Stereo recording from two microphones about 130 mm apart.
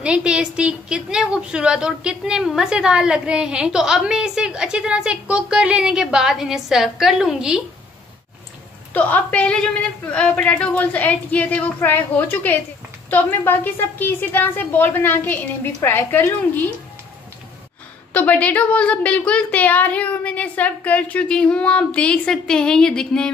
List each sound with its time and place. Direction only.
0.0 s a woman's voice: 10° right (ahead or behind)
8.9 s a woman's voice: 10° left (ahead or behind)
18.1 s a woman's voice: 10° left (ahead or behind)